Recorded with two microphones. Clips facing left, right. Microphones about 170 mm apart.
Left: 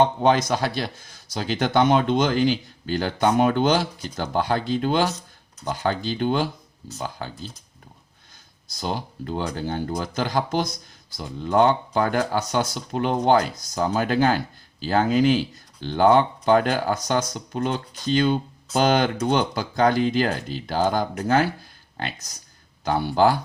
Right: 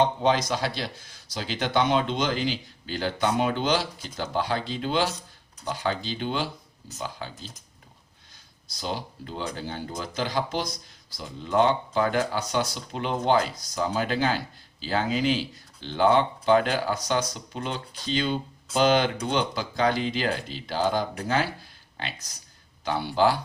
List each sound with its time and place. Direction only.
0.0 s speech: 50° left (ahead or behind)
8.7 s speech: 50° left (ahead or behind)